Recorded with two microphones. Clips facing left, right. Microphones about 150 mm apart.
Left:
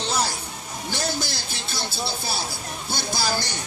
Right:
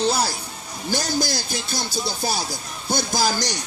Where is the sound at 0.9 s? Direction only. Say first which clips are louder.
Right 5 dB; 40° right (ahead or behind).